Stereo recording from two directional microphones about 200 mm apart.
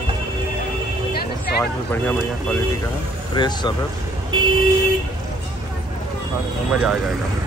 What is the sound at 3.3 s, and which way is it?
Speech, 20° left (ahead or behind).